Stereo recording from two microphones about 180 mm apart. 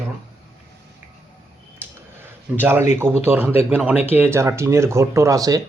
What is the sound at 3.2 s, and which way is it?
Speech, 10° right (ahead or behind).